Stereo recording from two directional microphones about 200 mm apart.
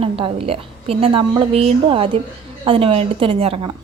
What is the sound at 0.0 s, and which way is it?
A woman's voice, 30° right (ahead or behind).